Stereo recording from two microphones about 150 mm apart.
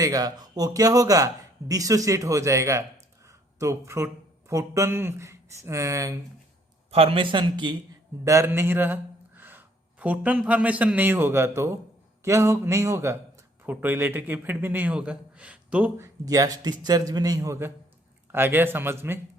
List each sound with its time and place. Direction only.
0.0 s speech: 25° right (ahead or behind)
6.9 s speech: 40° right (ahead or behind)
8.2 s a man's voice: 20° right (ahead or behind)
16.2 s a man's voice: 25° right (ahead or behind)